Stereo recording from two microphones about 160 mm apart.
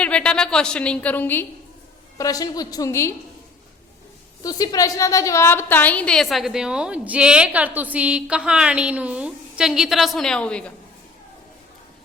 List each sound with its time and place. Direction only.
0.0 s a woman's voice: 5° left (ahead or behind)
4.4 s a woman's voice: 25° left (ahead or behind); by 10.7 s 5° left (ahead or behind)